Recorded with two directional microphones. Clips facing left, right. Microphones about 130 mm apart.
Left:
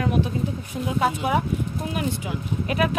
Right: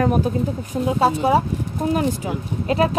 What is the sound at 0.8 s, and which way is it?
Speech, 30° right (ahead or behind).